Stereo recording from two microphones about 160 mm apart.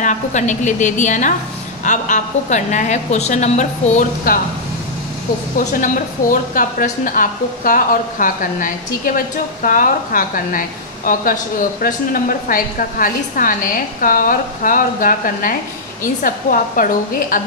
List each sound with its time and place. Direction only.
0.0 s a woman's voice: 50° left (ahead or behind)
5.7 s a woman's voice: 55° left (ahead or behind)